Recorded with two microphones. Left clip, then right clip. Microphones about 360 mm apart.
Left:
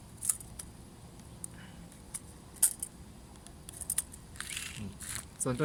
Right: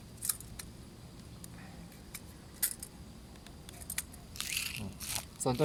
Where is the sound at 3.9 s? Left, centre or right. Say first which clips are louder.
Even; centre.